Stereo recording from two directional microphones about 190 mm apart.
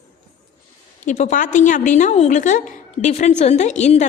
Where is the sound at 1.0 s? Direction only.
40° left (ahead or behind).